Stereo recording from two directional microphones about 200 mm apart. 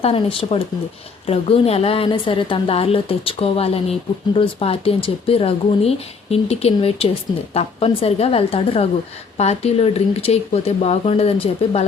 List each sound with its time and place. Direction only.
0.0 s a woman's voice: 30° left (ahead or behind)